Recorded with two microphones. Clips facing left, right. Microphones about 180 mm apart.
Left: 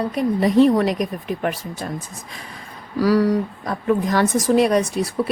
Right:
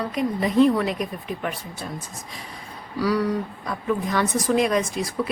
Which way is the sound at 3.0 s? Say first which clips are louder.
Left 6 dB; 40° left (ahead or behind).